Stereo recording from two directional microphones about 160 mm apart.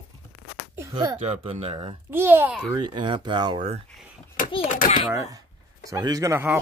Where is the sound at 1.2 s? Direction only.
40° right (ahead or behind).